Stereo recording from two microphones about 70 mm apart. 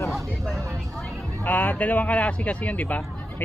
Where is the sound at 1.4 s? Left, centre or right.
Left.